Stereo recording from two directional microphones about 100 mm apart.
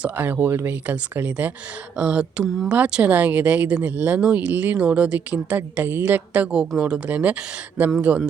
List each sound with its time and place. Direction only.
0.0 s speech: 20° right (ahead or behind)